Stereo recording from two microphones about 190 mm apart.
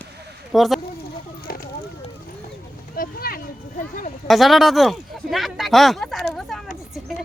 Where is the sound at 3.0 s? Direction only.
50° left (ahead or behind).